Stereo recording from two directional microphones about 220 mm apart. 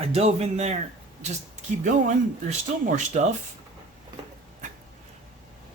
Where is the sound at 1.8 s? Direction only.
35° right (ahead or behind).